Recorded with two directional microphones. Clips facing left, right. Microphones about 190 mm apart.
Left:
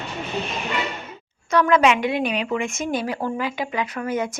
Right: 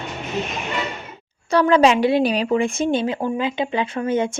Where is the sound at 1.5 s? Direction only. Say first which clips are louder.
Right 3 dB; 30° right (ahead or behind).